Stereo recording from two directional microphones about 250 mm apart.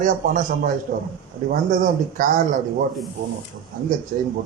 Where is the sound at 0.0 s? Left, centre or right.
Right.